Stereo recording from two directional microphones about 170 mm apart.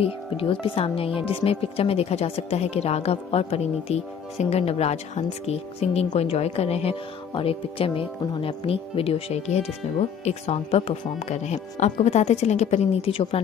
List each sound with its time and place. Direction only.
0.0 s speech: 30° left (ahead or behind)